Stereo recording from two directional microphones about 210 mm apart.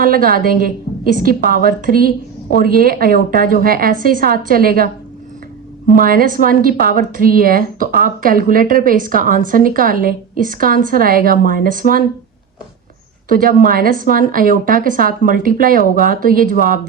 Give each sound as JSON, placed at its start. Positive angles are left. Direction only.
{"t": 0.0, "sound": "a woman's voice", "side_deg": -45}
{"t": 6.0, "sound": "a woman's voice", "side_deg": -40}
{"t": 13.2, "sound": "a woman's voice", "side_deg": -40}